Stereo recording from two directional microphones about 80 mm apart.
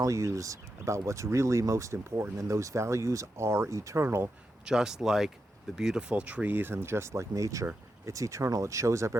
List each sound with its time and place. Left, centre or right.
0.0 s speech: right
4.6 s speech: centre; by 9.1 s right